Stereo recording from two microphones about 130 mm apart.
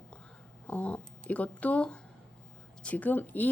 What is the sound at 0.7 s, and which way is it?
A woman's voice, 10° left (ahead or behind).